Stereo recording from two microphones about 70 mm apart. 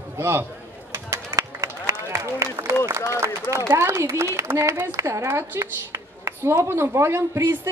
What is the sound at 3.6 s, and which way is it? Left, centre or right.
A woman's voice, right.